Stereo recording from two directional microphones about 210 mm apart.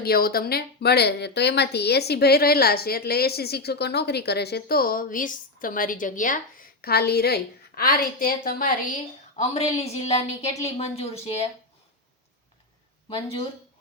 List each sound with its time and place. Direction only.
0.0 s speech: 45° left (ahead or behind)
9.7 s a woman's voice: 30° left (ahead or behind)
13.1 s speech: 25° left (ahead or behind)